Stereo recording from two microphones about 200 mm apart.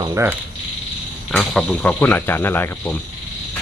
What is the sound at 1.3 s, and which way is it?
Speech, 5° left (ahead or behind).